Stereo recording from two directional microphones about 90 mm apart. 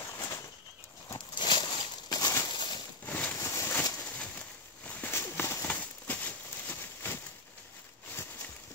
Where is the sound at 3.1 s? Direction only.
10° left (ahead or behind).